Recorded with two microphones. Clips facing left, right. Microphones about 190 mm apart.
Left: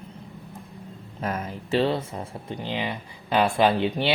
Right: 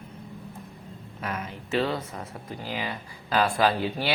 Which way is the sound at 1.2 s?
40° left (ahead or behind).